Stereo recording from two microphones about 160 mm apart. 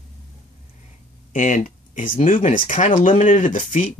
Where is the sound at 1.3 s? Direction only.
55° left (ahead or behind).